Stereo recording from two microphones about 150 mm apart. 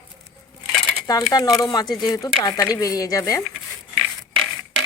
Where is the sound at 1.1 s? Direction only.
25° left (ahead or behind).